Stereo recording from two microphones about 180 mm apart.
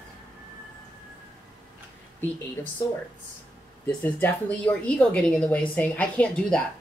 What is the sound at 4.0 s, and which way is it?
A woman's voice, 10° left (ahead or behind).